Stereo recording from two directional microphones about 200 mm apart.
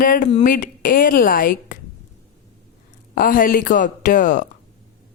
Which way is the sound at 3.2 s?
45° left (ahead or behind).